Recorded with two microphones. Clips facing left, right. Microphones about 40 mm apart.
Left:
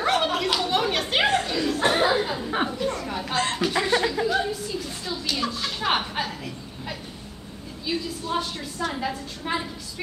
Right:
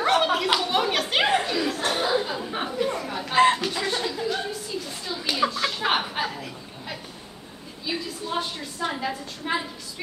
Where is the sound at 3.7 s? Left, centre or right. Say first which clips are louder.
Left 5 dB; centre.